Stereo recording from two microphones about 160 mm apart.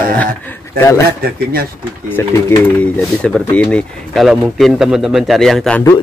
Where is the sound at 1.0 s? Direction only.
75° right (ahead or behind).